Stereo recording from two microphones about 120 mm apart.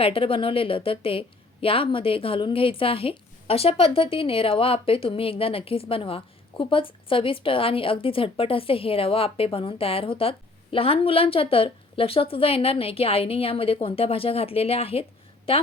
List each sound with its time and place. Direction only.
0.0 s a woman's voice: 50° left (ahead or behind)